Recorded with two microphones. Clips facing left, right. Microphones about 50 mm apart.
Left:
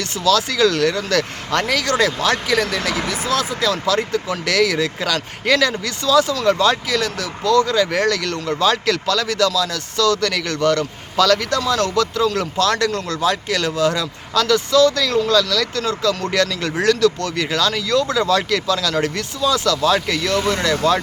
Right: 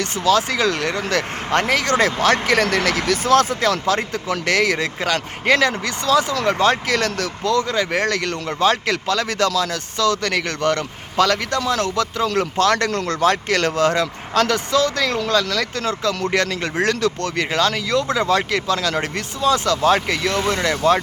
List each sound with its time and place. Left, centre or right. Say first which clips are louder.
0.0 s speech: even; right
7.4 s speech: left 4 dB; right